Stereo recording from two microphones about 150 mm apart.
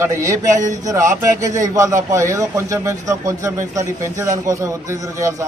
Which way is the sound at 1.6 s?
20° right (ahead or behind).